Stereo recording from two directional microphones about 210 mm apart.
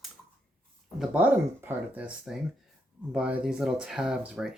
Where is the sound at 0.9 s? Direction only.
5° right (ahead or behind).